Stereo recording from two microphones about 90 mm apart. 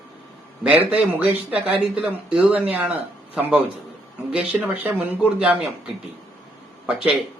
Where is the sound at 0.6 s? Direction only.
15° right (ahead or behind).